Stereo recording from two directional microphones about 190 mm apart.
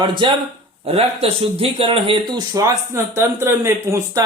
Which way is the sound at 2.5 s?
15° right (ahead or behind).